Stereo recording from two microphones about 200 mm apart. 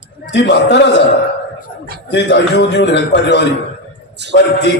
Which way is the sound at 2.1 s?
60° left (ahead or behind).